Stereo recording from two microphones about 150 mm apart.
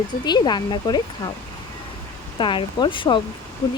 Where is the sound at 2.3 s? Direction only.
35° left (ahead or behind).